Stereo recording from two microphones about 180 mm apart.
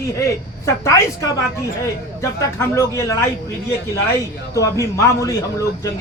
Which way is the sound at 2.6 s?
15° left (ahead or behind).